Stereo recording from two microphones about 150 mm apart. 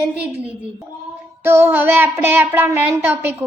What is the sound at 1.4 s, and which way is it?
A woman's voice, 15° right (ahead or behind).